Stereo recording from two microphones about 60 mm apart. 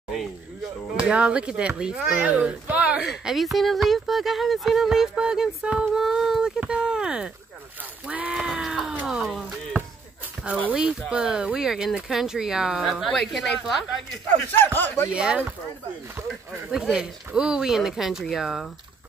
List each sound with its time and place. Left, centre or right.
0.9 s speech: centre
3.1 s speech: centre
6.1 s a sound: centre
8.1 s speech: centre
8.5 s a sound: centre
10.7 s speech: centre
14.3 s speech: left
15.1 s speech: centre
16.7 s speech: centre